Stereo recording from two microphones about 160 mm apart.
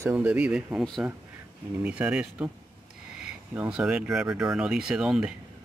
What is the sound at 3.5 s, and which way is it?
Speech, 10° right (ahead or behind).